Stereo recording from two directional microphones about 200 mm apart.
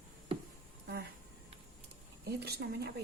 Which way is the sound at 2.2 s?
55° right (ahead or behind).